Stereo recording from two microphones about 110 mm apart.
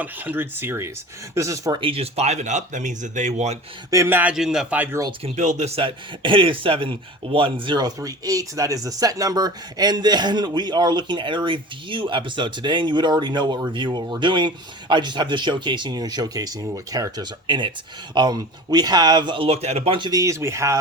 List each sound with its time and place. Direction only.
0.0 s speech: 15° right (ahead or behind)
1.7 s speech: 55° right (ahead or behind); by 3.6 s 90° right
3.9 s speech: 20° right (ahead or behind)
4.4 s a man's voice: 5° right (ahead or behind)
5.2 s speech: 90° right; by 20.1 s 55° right (ahead or behind)
20.1 s speech: 30° right (ahead or behind)